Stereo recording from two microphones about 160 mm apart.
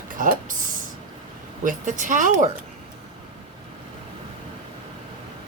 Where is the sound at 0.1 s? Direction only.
55° right (ahead or behind).